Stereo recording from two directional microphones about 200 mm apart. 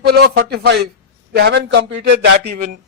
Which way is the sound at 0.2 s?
50° right (ahead or behind).